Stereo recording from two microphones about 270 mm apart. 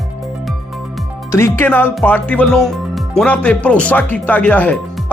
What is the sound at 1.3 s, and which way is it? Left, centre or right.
Speech, centre.